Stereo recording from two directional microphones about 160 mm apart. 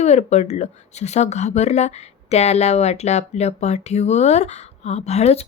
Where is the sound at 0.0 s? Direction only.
45° left (ahead or behind).